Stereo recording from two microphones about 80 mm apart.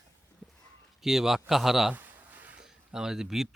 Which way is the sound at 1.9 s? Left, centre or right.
Right.